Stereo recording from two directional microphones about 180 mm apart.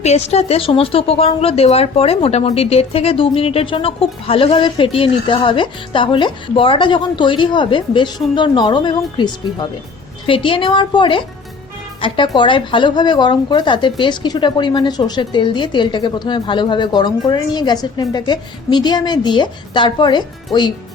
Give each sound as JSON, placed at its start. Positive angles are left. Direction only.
{"t": 0.0, "sound": "a woman's voice", "side_deg": 35}